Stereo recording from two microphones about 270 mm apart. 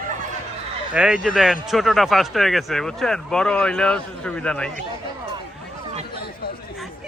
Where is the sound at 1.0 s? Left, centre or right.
Centre.